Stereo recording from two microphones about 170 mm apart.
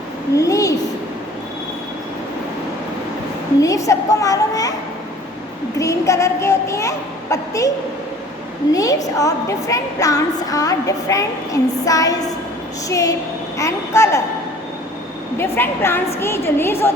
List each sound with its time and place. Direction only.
0.3 s a sound: 20° left (ahead or behind)
3.6 s a child's voice: 20° left (ahead or behind)
5.7 s a child's voice: 20° left (ahead or behind)
8.7 s a woman's voice: 20° left (ahead or behind)
15.4 s a child's voice: 15° left (ahead or behind)